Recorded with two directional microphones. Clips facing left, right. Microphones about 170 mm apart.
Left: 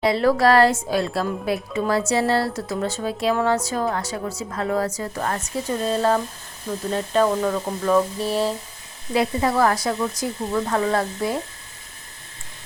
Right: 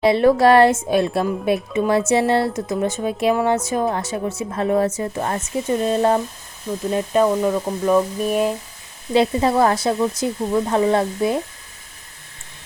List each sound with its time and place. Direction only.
0.0 s speech: 25° right (ahead or behind)
9.1 s speech: 25° right (ahead or behind)